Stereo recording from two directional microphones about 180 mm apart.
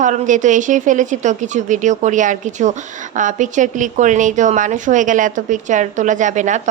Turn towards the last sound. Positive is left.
turn(degrees=-40)  # may be behind; listen again after turning